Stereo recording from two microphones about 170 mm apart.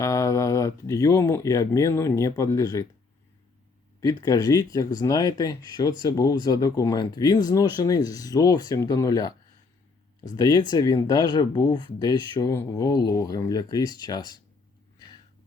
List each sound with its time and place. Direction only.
0.0 s speech: 20° left (ahead or behind)
4.2 s speech: 20° left (ahead or behind)